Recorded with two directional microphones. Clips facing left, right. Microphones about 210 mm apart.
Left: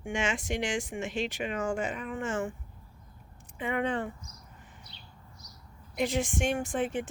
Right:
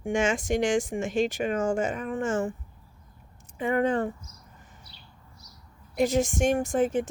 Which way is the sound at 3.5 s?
45° right (ahead or behind).